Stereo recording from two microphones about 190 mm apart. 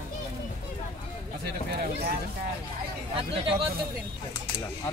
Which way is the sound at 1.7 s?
55° right (ahead or behind).